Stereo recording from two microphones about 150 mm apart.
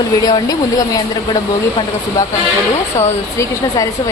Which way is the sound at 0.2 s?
25° left (ahead or behind).